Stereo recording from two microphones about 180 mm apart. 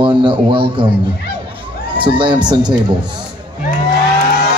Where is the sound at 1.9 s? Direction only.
30° right (ahead or behind).